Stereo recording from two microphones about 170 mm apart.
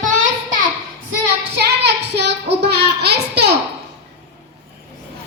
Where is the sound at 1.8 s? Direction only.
80° right.